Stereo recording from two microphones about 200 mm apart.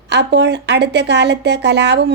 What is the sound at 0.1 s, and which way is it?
Speech, 60° right (ahead or behind).